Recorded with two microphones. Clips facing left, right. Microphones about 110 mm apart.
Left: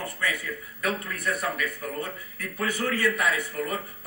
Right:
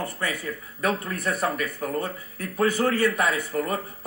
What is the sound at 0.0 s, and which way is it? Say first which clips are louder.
Speech: right 2 dB; 35° right (ahead or behind).